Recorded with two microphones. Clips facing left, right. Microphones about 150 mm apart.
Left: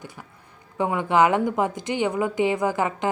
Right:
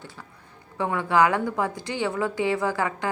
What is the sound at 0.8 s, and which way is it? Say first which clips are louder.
A woman's voice: left 2 dB; 20° left (ahead or behind).